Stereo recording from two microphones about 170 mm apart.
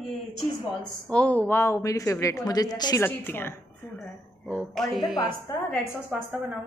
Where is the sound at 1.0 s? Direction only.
5° left (ahead or behind).